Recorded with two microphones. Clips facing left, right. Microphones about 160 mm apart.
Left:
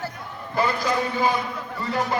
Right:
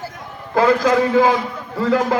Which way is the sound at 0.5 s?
90° right.